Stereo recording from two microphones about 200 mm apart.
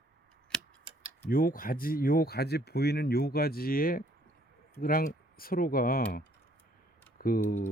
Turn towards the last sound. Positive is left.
turn(degrees=45)  # may be behind; listen again after turning